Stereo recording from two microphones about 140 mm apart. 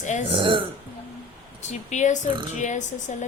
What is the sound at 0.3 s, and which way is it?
Speech, 35° right (ahead or behind).